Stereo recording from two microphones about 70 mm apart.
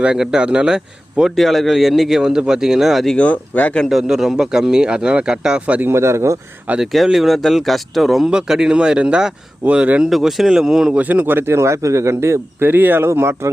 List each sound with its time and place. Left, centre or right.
0.0 s speech: centre
1.4 s speech: centre
3.2 s speech: left
4.0 s speech: centre
5.8 s speech: right
6.7 s speech: centre
8.3 s speech: centre
10.1 s speech: centre
10.9 s speech: right